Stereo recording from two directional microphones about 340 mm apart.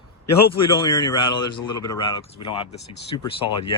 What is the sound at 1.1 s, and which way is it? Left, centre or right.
A man's voice, centre.